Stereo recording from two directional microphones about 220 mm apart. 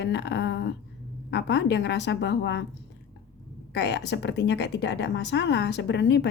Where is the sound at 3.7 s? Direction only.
50° left (ahead or behind).